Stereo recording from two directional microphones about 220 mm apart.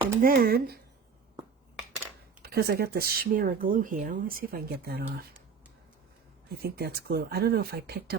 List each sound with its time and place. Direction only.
0.2 s speech: 40° right (ahead or behind)
2.4 s speech: 45° right (ahead or behind)
6.6 s speech: 45° right (ahead or behind)